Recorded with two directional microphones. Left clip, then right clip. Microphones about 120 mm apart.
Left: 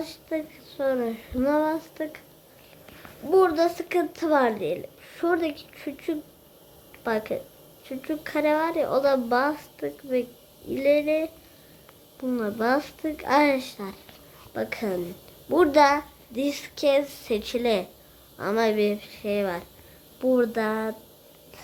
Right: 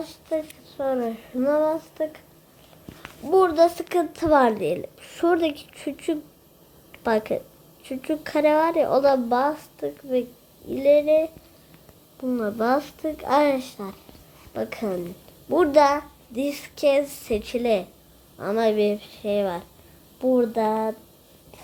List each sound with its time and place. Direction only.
0.0 s a woman's voice: 5° left (ahead or behind)
0.8 s speech: 15° left (ahead or behind)
3.2 s a child's voice: 5° right (ahead or behind)
4.5 s a woman's voice: 30° right (ahead or behind)
9.1 s a woman's voice: centre (ahead or behind)